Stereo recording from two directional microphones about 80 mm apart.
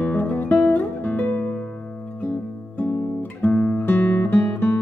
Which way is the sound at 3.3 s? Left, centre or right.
Centre.